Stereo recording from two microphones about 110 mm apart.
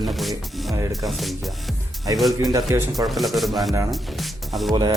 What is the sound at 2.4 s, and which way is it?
Speech, 35° right (ahead or behind).